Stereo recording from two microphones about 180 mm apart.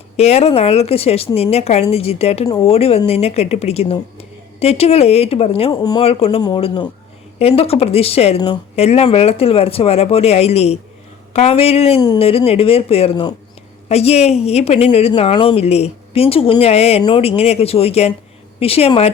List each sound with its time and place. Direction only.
0.2 s a woman's voice: 35° left (ahead or behind)